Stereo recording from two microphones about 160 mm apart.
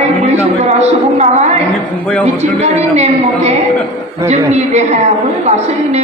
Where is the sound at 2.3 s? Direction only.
45° right (ahead or behind).